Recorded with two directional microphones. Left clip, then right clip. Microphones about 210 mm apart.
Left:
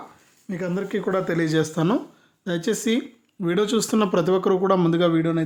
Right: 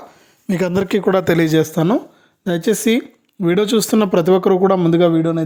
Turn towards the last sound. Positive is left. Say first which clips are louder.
# right 6 dB
turn(degrees=-25)  # may be behind; listen again after turning